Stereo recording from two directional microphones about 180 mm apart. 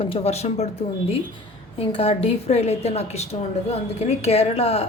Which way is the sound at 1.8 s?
30° left (ahead or behind).